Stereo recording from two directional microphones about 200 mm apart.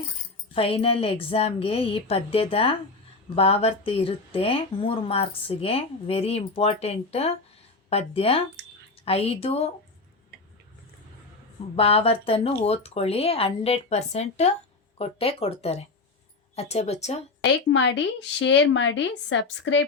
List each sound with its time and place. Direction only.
0.5 s speech: 30° left (ahead or behind)
11.8 s speech: 30° left (ahead or behind)
17.7 s a woman's voice: 65° left (ahead or behind)